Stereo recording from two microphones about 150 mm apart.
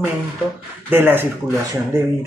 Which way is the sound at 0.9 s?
15° right (ahead or behind).